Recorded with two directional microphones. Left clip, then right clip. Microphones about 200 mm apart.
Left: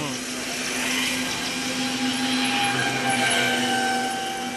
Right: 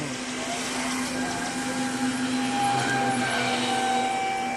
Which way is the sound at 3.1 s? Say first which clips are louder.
Left 4 dB; 40° left (ahead or behind).